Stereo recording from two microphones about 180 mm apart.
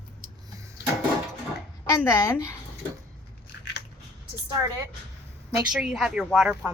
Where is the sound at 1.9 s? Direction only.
15° left (ahead or behind).